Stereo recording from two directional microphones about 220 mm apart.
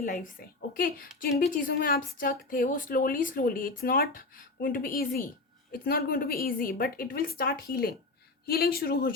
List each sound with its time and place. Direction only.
0.0 s a woman's voice: 40° left (ahead or behind)